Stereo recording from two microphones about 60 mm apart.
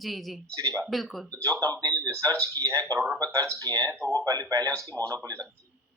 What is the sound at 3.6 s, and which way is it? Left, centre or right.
Speech, right.